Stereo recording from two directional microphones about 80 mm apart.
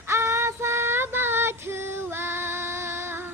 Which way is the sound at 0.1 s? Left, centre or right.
Right.